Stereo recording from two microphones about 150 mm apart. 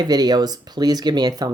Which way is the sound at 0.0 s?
25° right (ahead or behind).